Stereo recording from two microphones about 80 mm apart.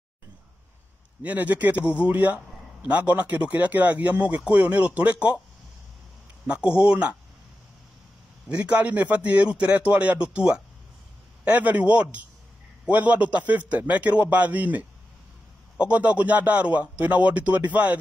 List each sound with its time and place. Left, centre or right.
1.2 s speech: right
6.4 s speech: centre
8.5 s speech: centre